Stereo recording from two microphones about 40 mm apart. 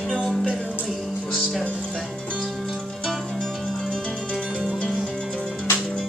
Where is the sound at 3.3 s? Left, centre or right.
Centre.